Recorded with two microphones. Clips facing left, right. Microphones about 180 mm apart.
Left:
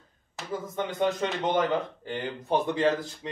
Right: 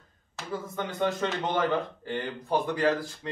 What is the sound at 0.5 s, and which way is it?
A man's voice, 15° left (ahead or behind).